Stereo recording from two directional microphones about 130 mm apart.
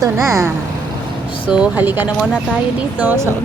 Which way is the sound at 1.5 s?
10° right (ahead or behind).